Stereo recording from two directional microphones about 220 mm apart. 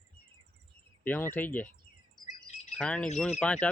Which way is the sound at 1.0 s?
10° left (ahead or behind).